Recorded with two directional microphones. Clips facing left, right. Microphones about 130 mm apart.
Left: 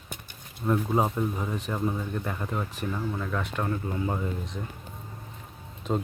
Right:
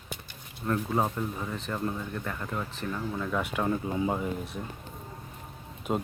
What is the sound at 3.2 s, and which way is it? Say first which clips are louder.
Speech: right 1 dB; 5° right (ahead or behind).